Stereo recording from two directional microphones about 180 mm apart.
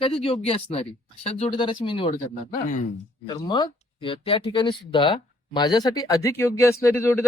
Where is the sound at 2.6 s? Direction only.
45° left (ahead or behind).